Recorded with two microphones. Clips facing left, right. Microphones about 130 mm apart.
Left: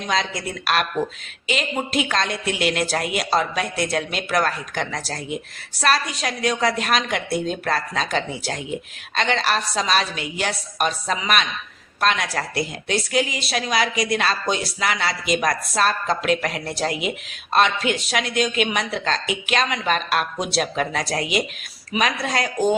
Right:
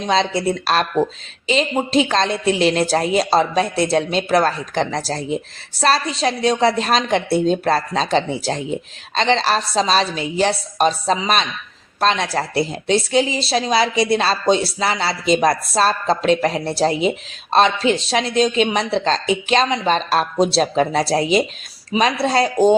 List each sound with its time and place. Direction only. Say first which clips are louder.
0.0 s a woman's voice: right 7 dB; 30° right (ahead or behind)